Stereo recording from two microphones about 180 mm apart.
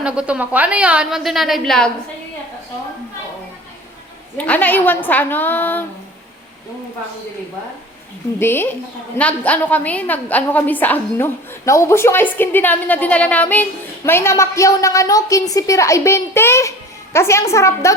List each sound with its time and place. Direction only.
0.0 s a woman's voice: 5° right (ahead or behind)
4.4 s a woman's voice: 10° left (ahead or behind)
8.4 s a woman's voice: 10° left (ahead or behind)